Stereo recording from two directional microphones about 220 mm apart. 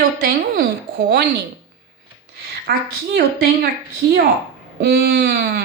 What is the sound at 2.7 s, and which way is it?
Speech, 45° right (ahead or behind).